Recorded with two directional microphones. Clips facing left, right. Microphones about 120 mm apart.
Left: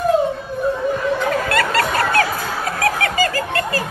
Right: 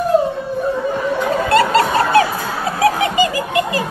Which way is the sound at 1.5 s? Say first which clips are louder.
Right 5 dB; 25° right (ahead or behind).